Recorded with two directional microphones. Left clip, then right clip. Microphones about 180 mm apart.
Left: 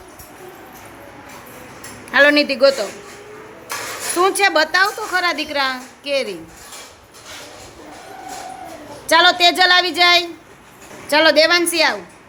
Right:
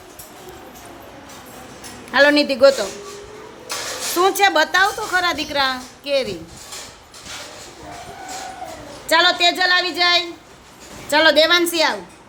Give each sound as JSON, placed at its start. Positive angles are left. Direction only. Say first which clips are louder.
{"t": 2.1, "sound": "a woman's voice", "louder": "left 1 dB", "side_deg": -5}
{"t": 4.2, "sound": "a woman's voice", "louder": "even", "side_deg": 0}
{"t": 9.0, "sound": "a woman's voice", "louder": "left 3 dB", "side_deg": 15}